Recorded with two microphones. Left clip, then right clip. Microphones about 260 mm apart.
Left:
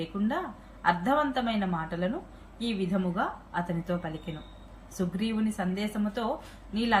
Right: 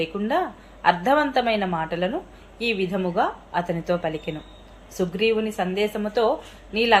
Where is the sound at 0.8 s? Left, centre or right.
Right.